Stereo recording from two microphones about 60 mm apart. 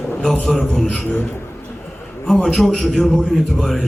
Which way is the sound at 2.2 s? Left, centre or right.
Centre.